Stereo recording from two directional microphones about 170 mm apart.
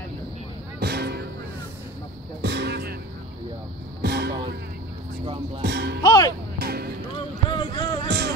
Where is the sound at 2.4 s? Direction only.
85° right.